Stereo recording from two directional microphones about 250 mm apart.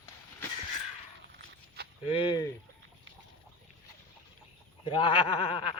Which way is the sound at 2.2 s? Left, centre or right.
Centre.